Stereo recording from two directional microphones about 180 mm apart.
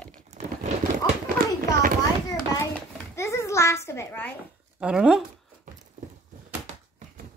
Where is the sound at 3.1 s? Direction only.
15° left (ahead or behind).